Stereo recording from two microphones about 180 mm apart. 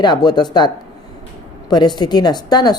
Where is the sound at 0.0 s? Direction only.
25° left (ahead or behind).